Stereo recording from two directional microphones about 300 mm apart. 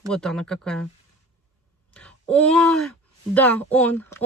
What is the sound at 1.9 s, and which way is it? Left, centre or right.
Speech, centre.